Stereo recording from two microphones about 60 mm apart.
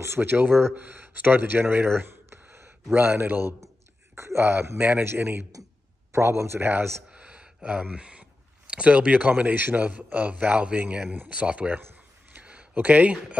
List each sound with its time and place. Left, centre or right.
0.0 s speech: right
0.7 s speech: right
2.0 s a sound: right
4.1 s speech: right
6.1 s speech: right
7.1 s speech: centre
11.8 s a sound: right